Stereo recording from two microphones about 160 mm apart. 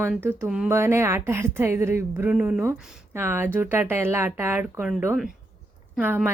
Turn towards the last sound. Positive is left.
turn(degrees=-10)  # may be behind; listen again after turning